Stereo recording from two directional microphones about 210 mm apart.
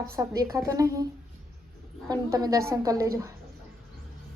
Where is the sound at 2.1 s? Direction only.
20° right (ahead or behind).